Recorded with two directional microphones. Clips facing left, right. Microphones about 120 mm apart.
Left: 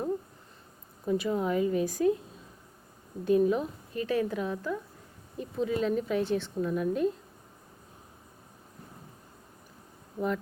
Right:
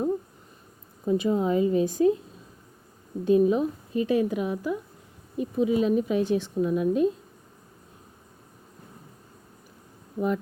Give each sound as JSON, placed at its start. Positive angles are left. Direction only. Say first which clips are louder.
{"t": 1.0, "sound": "a woman's voice", "louder": "right 5 dB", "side_deg": -20}
{"t": 3.2, "sound": "speech", "louder": "right 4 dB", "side_deg": -20}
{"t": 10.2, "sound": "a woman's voice", "louder": "right 4 dB", "side_deg": -20}